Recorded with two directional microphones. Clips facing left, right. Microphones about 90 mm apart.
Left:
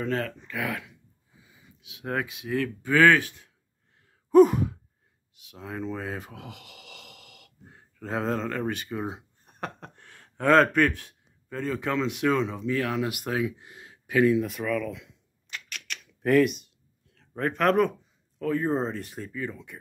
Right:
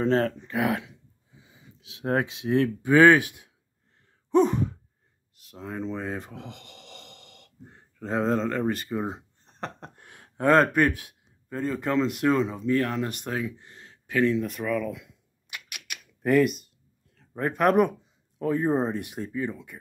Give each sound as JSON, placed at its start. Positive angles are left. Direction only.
{"t": 0.0, "sound": "speech", "side_deg": -30}
{"t": 4.3, "sound": "sigh", "side_deg": 5}
{"t": 5.3, "sound": "speech", "side_deg": 0}
{"t": 9.9, "sound": "gasp", "side_deg": -15}
{"t": 10.5, "sound": "speech", "side_deg": -5}